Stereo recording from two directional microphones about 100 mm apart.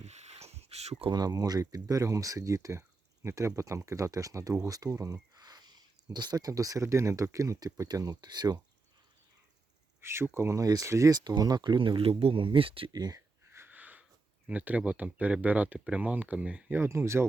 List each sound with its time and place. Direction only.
0.1 s a sound: 90° right
1.1 s speech: 40° right (ahead or behind)
4.7 s a sound: 35° right (ahead or behind)
6.1 s speech: 40° right (ahead or behind)
10.0 s speech: 25° right (ahead or behind); by 12.9 s 65° right (ahead or behind)
12.9 s speech: 40° right (ahead or behind)
13.5 s sniff: 20° right (ahead or behind)
14.4 s speech: 15° right (ahead or behind)